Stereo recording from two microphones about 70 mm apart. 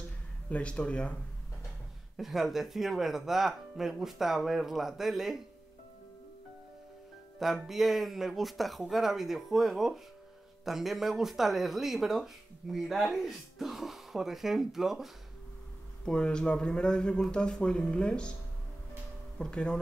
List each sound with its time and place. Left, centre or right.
0.5 s speech: centre
2.1 s speech: centre
7.3 s speech: centre
16.1 s speech: centre
19.3 s speech: centre